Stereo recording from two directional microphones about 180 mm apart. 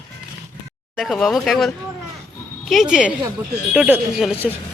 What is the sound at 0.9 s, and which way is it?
Speech, centre (ahead or behind).